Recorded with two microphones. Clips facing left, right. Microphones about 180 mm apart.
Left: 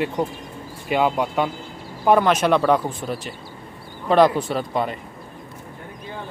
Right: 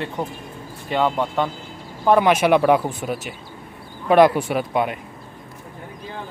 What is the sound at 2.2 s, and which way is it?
Speech, 10° right (ahead or behind).